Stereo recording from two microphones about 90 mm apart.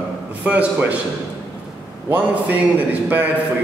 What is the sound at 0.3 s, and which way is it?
Speech, 15° right (ahead or behind).